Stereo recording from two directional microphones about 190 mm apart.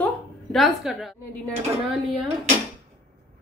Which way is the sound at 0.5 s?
Centre (ahead or behind).